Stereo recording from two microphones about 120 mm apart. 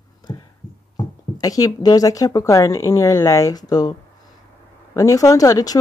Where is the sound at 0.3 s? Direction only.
40° left (ahead or behind).